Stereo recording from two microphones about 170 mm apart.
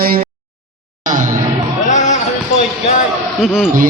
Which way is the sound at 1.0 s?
50° right (ahead or behind).